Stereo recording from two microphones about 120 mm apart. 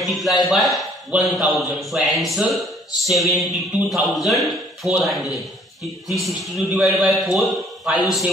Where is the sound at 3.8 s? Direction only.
Centre (ahead or behind).